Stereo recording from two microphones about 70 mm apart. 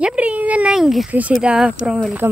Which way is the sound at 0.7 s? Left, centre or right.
Centre.